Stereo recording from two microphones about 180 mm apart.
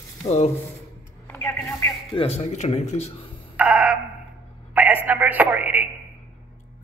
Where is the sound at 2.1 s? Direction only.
35° left (ahead or behind).